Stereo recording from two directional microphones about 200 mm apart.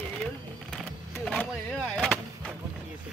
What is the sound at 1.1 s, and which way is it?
Vehicle, centre (ahead or behind).